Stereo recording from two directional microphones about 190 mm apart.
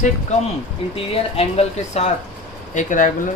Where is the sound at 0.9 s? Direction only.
30° left (ahead or behind).